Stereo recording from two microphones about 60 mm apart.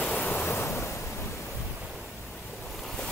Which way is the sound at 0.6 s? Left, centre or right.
Left.